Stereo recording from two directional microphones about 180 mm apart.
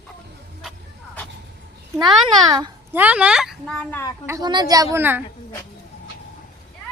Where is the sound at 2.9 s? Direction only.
10° right (ahead or behind); by 4.1 s 10° left (ahead or behind).